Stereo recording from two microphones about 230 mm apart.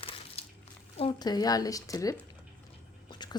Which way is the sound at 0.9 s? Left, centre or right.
Left.